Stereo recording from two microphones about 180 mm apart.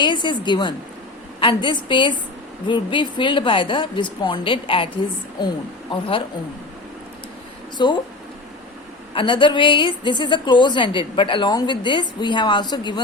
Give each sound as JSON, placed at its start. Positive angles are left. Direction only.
{"t": 0.0, "sound": "a woman's voice", "side_deg": 25}
{"t": 5.9, "sound": "a woman's voice", "side_deg": 30}
{"t": 7.8, "sound": "a woman's voice", "side_deg": 25}
{"t": 9.1, "sound": "a woman's voice", "side_deg": 25}